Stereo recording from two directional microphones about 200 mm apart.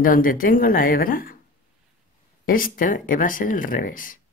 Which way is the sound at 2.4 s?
45° left (ahead or behind).